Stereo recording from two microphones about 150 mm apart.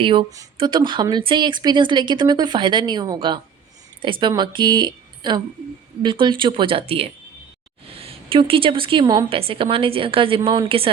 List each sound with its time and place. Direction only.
0.0 s a woman's voice: 35° right (ahead or behind)